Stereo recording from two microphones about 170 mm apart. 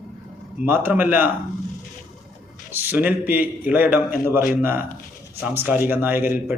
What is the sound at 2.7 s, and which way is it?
A man's voice, 10° right (ahead or behind).